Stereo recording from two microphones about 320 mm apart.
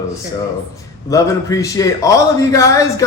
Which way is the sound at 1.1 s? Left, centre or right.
Centre.